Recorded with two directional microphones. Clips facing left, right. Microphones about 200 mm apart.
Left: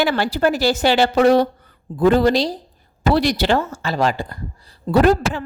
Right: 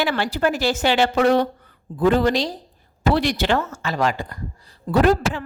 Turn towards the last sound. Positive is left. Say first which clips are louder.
# left 2 dB
turn(degrees=40)  # may be behind; listen again after turning